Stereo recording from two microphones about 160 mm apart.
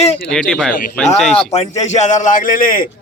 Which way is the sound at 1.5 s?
45° left (ahead or behind).